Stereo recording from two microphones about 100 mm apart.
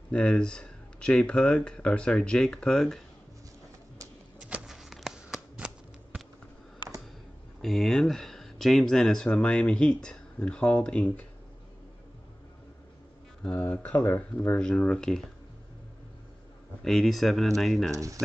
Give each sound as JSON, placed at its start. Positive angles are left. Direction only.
{"t": 0.1, "sound": "speech", "side_deg": 10}
{"t": 4.4, "sound": "a sound", "side_deg": -10}
{"t": 7.6, "sound": "speech", "side_deg": 0}
{"t": 13.4, "sound": "speech", "side_deg": 15}
{"t": 16.8, "sound": "speech", "side_deg": 0}
{"t": 17.9, "sound": "speech", "side_deg": -30}